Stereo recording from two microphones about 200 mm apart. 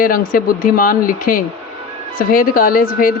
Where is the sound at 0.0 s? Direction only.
45° left (ahead or behind).